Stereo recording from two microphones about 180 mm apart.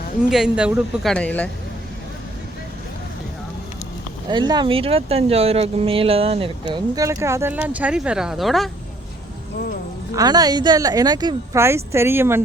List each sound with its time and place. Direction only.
0.2 s speech: 5° right (ahead or behind)
1.1 s speech: 5° left (ahead or behind)
4.3 s speech: 25° right (ahead or behind)
6.9 s speech: 20° right (ahead or behind); by 8.7 s centre (ahead or behind)
10.2 s a woman's voice: 20° right (ahead or behind)